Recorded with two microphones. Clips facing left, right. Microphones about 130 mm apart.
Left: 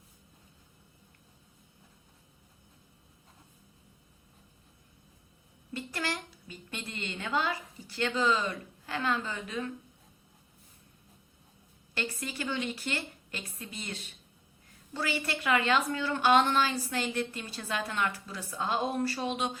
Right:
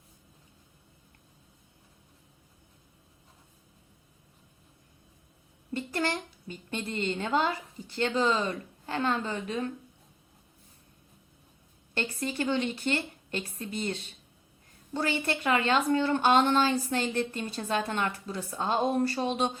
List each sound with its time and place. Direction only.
5.9 s a woman's voice: 25° right (ahead or behind)
11.9 s a woman's voice: 30° right (ahead or behind)